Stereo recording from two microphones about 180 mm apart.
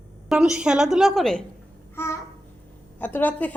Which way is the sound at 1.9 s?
15° left (ahead or behind).